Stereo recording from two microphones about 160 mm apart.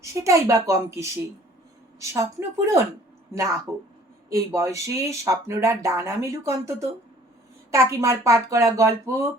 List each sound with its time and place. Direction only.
0.0 s speech: 20° right (ahead or behind)